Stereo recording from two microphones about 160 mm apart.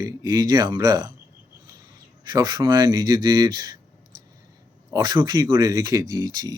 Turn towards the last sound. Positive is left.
turn(degrees=-25)  # may be behind; listen again after turning